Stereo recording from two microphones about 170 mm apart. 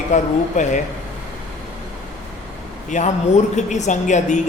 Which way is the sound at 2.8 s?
45° left (ahead or behind).